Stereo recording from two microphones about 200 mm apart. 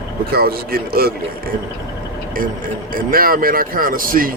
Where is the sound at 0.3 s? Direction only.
50° right (ahead or behind).